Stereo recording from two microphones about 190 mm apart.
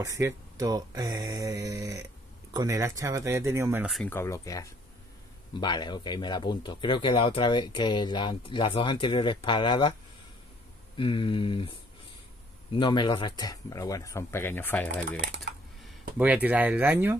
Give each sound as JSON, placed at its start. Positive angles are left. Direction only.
{"t": 0.0, "sound": "speech", "side_deg": -15}
{"t": 3.9, "sound": "speech", "side_deg": 10}
{"t": 11.0, "sound": "speech", "side_deg": 25}
{"t": 16.2, "sound": "speech", "side_deg": -10}